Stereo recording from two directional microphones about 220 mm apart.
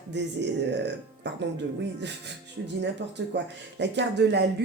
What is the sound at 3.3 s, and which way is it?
Speech, 50° right (ahead or behind).